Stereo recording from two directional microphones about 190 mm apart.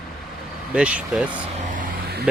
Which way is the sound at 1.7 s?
55° right (ahead or behind).